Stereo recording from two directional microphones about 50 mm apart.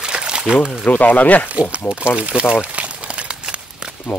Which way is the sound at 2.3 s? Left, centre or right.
Centre.